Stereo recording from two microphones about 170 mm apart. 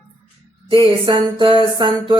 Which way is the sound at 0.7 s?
30° right (ahead or behind).